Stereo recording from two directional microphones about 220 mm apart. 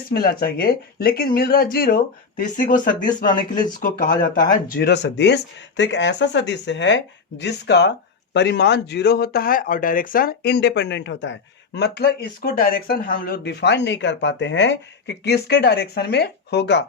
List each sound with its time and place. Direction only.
0.1 s speech: 45° left (ahead or behind)
3.2 s speech: 20° left (ahead or behind)
3.8 s speech: 40° left (ahead or behind)